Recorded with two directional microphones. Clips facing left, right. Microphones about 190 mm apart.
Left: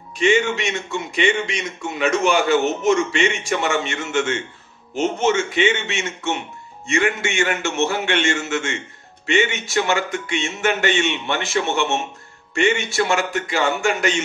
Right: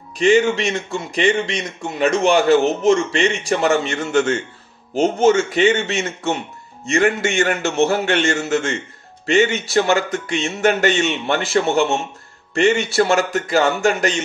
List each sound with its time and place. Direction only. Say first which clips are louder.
0.2 s a man's voice: right 4 dB; 35° right (ahead or behind)